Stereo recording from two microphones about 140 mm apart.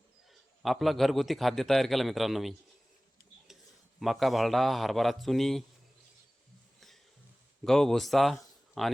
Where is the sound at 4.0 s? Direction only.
Centre (ahead or behind).